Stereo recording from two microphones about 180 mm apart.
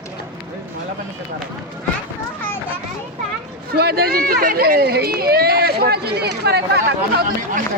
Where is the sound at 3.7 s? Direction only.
60° right (ahead or behind).